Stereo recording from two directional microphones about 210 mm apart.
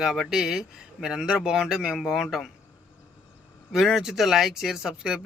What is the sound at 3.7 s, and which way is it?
Speech, centre (ahead or behind).